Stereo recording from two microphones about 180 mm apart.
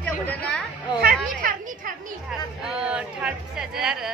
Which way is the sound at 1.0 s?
55° right (ahead or behind).